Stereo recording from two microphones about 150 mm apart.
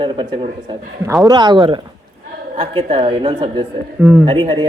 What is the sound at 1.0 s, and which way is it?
A man's voice, 25° right (ahead or behind).